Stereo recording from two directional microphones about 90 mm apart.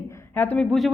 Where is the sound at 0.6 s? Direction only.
Centre (ahead or behind).